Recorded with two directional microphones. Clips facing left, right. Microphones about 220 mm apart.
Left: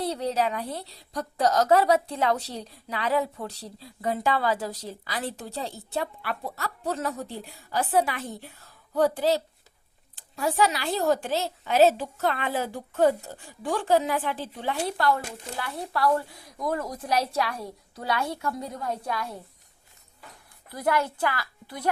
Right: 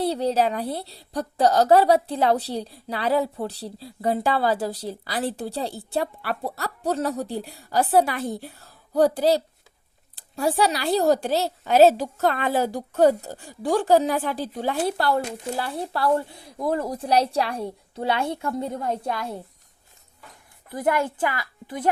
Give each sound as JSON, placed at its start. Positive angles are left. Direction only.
{"t": 0.0, "sound": "a woman's voice", "side_deg": -30}
{"t": 20.7, "sound": "a woman's voice", "side_deg": -20}